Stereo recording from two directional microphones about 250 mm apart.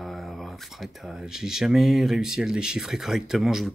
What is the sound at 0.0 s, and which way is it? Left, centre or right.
Speech, centre.